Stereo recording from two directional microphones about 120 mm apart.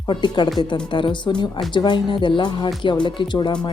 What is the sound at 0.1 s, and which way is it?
Speech, 40° left (ahead or behind).